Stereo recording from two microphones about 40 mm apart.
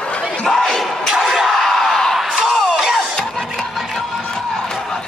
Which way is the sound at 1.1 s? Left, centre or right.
Centre.